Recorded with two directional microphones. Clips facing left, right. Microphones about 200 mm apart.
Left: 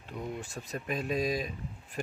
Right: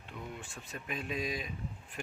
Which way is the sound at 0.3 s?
40° left (ahead or behind).